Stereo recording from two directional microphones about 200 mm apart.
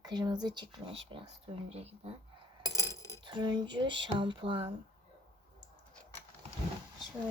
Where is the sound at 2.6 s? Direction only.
15° right (ahead or behind).